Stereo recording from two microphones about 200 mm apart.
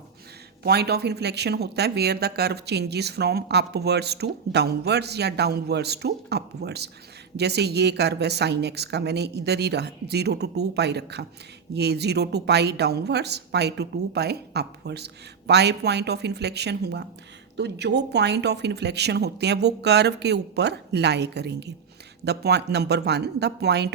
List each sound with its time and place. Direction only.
0.6 s speech: 55° right (ahead or behind)